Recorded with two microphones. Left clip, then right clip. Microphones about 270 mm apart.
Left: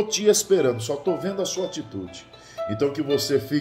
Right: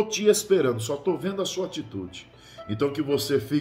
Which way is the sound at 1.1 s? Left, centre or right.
Centre.